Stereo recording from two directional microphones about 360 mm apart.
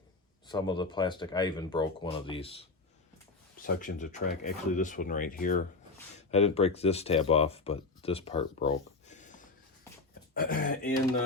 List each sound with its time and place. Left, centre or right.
0.4 s speech: centre